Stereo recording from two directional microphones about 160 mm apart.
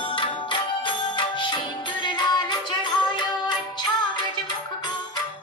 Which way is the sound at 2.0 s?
25° left (ahead or behind).